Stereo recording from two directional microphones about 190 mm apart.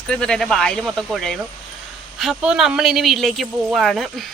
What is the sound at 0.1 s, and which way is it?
A man's voice, 5° left (ahead or behind).